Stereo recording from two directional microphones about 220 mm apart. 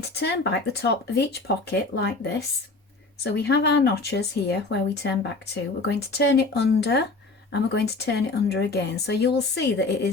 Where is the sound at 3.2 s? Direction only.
50° left (ahead or behind).